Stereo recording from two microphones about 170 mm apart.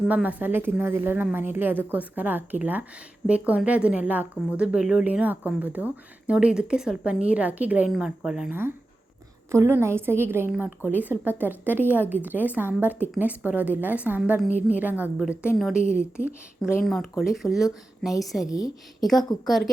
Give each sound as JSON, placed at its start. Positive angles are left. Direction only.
{"t": 0.1, "sound": "a woman's voice", "side_deg": -10}
{"t": 18.4, "sound": "a woman's voice", "side_deg": 20}
{"t": 19.5, "sound": "speech", "side_deg": 0}